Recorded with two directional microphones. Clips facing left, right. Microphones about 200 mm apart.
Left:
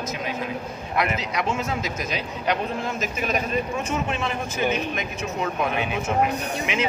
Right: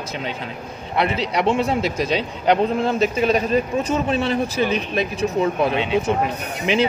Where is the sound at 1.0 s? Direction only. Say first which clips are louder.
Right 5 dB; 30° right (ahead or behind).